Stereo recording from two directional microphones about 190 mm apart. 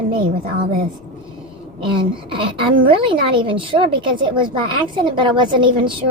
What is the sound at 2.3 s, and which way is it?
A woman's voice, 25° right (ahead or behind).